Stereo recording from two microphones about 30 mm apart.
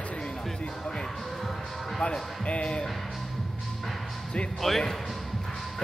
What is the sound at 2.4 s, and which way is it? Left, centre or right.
Speech, left.